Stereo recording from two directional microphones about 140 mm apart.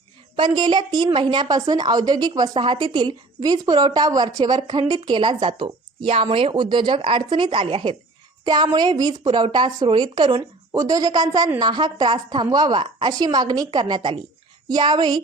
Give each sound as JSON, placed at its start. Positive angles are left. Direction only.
{"t": 0.3, "sound": "a woman's voice", "side_deg": -30}